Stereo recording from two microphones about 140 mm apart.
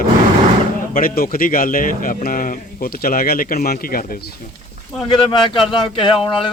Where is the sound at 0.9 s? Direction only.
90° left.